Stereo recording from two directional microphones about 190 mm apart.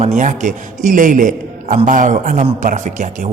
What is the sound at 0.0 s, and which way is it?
A man's voice, 40° right (ahead or behind).